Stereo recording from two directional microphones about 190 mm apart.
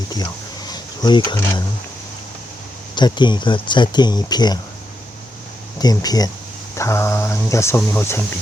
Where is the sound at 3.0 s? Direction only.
25° left (ahead or behind).